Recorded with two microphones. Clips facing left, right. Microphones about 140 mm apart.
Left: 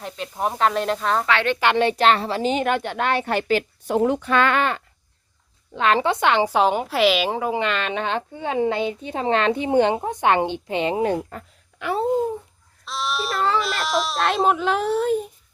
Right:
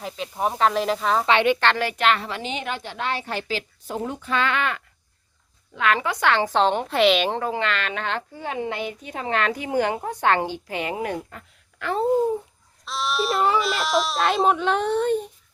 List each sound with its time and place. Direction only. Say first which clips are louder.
0.0 s speech: even; centre (ahead or behind)
1.3 s a woman's voice: right 4 dB; 20° right (ahead or behind)
1.7 s a woman's voice: left 4 dB; 25° left (ahead or behind); by 4.6 s 55° left (ahead or behind)
5.7 s a woman's voice: left 4 dB; 30° left (ahead or behind); by 7.5 s 5° left (ahead or behind)
7.5 s speech: left 3 dB; 20° left (ahead or behind); by 11.4 s 35° left (ahead or behind)
11.8 s speech: left 2 dB; 20° left (ahead or behind)
12.8 s speech: right 1 dB; centre (ahead or behind)